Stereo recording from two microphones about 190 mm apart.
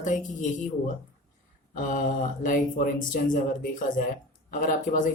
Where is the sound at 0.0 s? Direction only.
40° left (ahead or behind).